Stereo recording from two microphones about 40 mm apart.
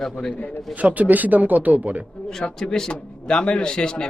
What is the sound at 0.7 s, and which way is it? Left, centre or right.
Speech, right.